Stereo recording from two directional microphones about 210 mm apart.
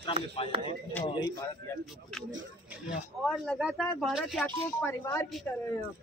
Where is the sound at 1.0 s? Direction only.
20° left (ahead or behind).